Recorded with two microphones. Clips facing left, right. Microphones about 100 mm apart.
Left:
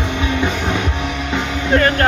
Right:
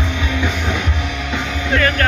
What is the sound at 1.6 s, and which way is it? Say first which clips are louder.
Vehicle: left 3 dB; 35° left (ahead or behind).